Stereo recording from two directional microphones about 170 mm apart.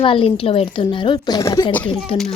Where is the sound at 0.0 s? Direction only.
30° left (ahead or behind).